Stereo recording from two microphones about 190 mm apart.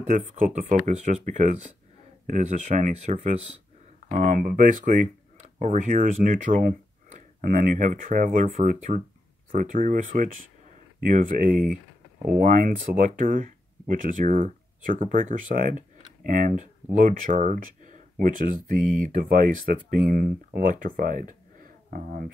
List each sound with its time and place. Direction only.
0.0 s speech: 40° right (ahead or behind)